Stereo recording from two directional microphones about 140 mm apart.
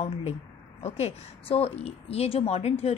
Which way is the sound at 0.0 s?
45° left (ahead or behind).